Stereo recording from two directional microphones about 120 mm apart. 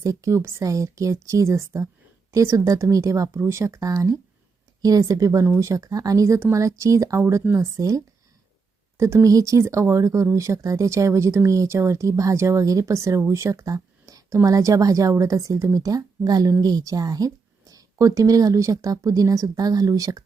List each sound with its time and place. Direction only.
0.0 s speech: 30° right (ahead or behind)